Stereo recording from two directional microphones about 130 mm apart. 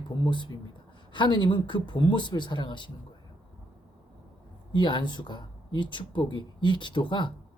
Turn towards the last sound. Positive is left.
turn(degrees=35)  # may be behind; listen again after turning